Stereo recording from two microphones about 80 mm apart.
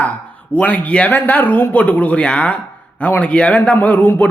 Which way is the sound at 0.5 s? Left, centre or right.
Centre.